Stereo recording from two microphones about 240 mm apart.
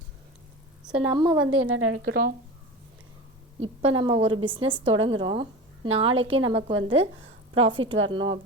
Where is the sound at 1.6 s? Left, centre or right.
Right.